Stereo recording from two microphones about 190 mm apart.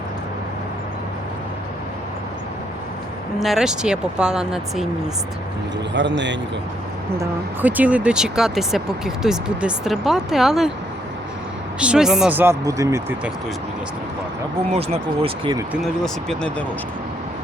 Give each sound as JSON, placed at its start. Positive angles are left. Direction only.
{"t": 3.4, "sound": "speech", "side_deg": 0}
{"t": 5.9, "sound": "speech", "side_deg": -70}
{"t": 7.2, "sound": "speech", "side_deg": -10}
{"t": 11.8, "sound": "speech", "side_deg": -5}
{"t": 14.7, "sound": "speech", "side_deg": -35}
{"t": 15.8, "sound": "speech", "side_deg": 0}